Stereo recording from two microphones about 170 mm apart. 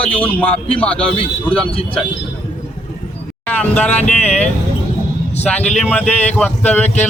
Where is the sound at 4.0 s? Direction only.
40° left (ahead or behind).